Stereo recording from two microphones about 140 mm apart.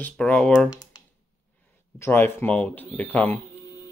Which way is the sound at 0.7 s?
25° left (ahead or behind).